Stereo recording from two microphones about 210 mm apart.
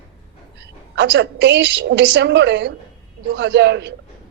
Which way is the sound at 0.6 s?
60° right (ahead or behind).